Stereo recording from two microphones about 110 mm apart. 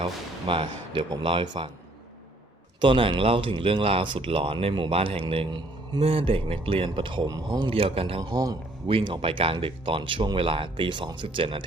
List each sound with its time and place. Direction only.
0.0 s speech: 50° right (ahead or behind)
2.8 s speech: 50° right (ahead or behind)
5.5 s a man's voice: 40° right (ahead or behind)
6.0 s speech: 60° right (ahead or behind)
7.3 s speech: 35° right (ahead or behind)
7.7 s speech: 55° right (ahead or behind)
8.2 s speech: 35° right (ahead or behind)
8.9 s speech: 50° right (ahead or behind)